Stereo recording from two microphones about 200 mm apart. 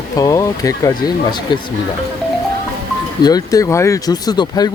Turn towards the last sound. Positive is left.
turn(degrees=20)  # may be behind; listen again after turning